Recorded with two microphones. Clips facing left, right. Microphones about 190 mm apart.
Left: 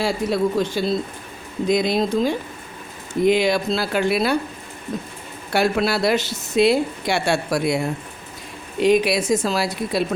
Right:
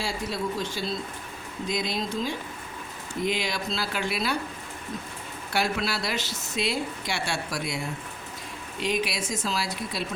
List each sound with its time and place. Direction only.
0.0 s speech: 65° left (ahead or behind)
5.5 s speech: 60° left (ahead or behind)